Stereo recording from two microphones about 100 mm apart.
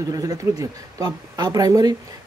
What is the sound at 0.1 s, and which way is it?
Speech, 35° right (ahead or behind).